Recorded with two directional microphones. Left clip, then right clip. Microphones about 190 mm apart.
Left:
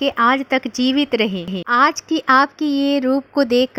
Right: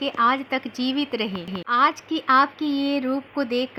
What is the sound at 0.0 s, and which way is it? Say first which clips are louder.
Speech: left 5 dB; 40° left (ahead or behind).